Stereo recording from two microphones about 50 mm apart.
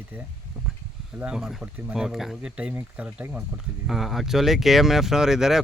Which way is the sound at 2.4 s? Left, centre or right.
Right.